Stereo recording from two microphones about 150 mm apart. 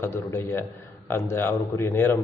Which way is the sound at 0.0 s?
15° left (ahead or behind).